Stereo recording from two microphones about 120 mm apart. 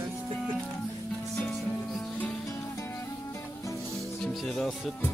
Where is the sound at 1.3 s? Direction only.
Centre (ahead or behind).